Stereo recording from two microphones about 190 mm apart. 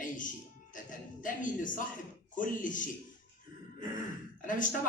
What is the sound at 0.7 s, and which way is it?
Speech, 45° left (ahead or behind).